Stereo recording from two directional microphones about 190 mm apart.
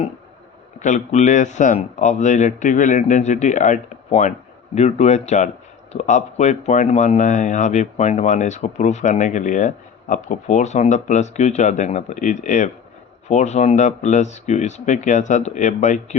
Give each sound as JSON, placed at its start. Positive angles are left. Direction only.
{"t": 0.8, "sound": "a man's voice", "side_deg": 40}